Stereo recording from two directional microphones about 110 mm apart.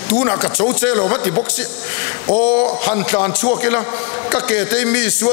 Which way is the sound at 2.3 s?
15° left (ahead or behind).